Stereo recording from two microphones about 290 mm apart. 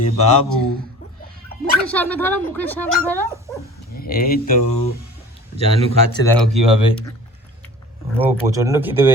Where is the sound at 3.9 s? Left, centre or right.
Left.